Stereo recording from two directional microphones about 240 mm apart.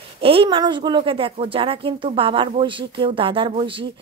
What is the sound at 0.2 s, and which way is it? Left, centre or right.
Speech, right.